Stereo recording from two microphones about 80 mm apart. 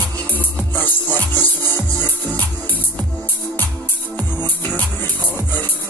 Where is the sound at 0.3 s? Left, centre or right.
Left.